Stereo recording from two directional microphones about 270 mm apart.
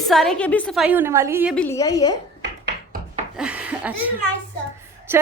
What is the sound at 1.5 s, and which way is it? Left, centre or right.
Speech, centre.